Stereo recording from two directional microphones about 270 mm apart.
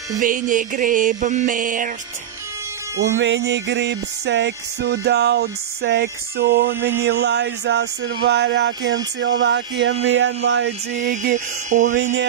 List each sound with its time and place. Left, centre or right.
0.2 s music: right
3.2 s music: right
6.7 s mantra: centre
7.1 s music: right
8.3 s a sound: right
10.0 s music: right
11.0 s music: right
11.9 s a sound: right